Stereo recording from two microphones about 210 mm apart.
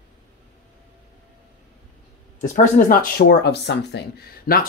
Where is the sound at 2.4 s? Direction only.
35° left (ahead or behind).